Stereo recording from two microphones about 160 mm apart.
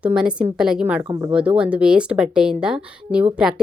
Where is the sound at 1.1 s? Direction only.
25° right (ahead or behind).